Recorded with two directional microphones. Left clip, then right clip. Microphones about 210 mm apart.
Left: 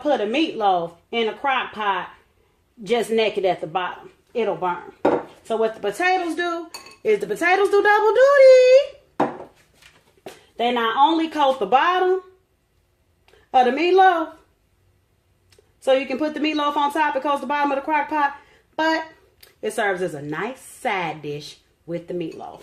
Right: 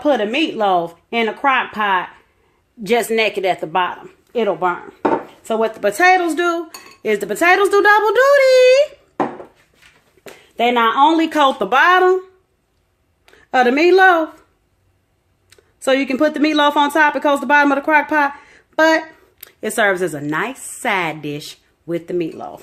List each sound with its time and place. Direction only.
0.0 s a child's voice: 50° right (ahead or behind)
10.6 s speech: 50° right (ahead or behind)
13.2 s a woman's voice: 50° right (ahead or behind)
15.4 s speech: 50° right (ahead or behind)